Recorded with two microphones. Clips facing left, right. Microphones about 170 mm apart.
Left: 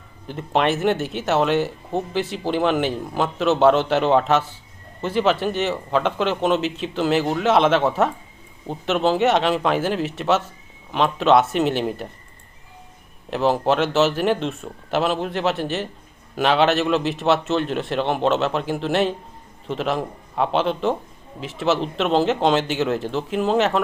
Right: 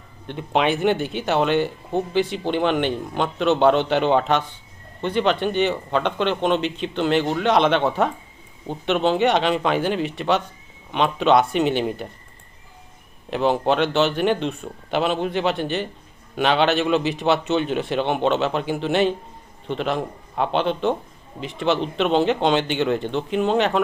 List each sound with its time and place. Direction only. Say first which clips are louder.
0.3 s speech: even; centre (ahead or behind)
13.3 s speech: even; centre (ahead or behind)